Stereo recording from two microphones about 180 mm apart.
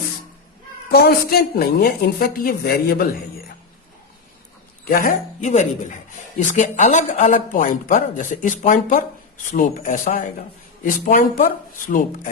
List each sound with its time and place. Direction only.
0.9 s a woman's voice: 60° left (ahead or behind)
4.9 s speech: 50° left (ahead or behind)